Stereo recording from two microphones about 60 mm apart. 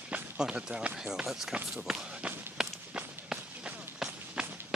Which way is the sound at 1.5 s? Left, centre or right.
Centre.